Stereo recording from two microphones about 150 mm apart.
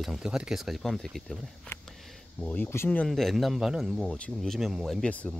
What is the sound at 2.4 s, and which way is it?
Speech, 10° left (ahead or behind).